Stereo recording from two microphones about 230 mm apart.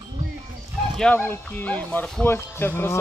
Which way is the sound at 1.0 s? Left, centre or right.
Centre.